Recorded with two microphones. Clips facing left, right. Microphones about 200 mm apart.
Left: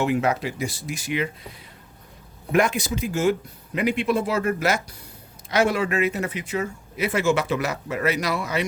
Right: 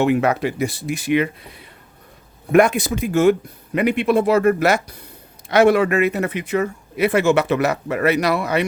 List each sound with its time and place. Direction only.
0.0 s speech: 60° right (ahead or behind)